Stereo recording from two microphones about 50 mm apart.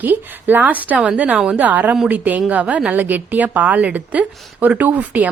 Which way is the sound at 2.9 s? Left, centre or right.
Right.